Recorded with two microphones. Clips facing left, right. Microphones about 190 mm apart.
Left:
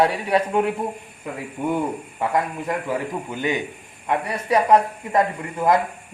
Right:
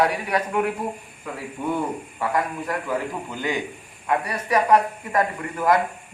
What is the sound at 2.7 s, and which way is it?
A woman's voice, 20° left (ahead or behind).